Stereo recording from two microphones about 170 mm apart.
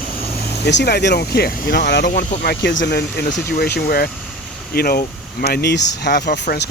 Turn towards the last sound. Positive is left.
turn(degrees=75)  # may be behind; listen again after turning